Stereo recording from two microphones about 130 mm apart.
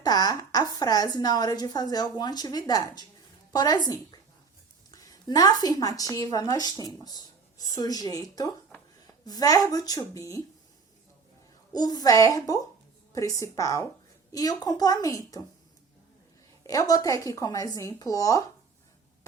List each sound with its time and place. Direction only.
0.0 s a woman's voice: 30° left (ahead or behind)
11.7 s a woman's voice: 30° left (ahead or behind)
16.6 s a woman's voice: 30° left (ahead or behind)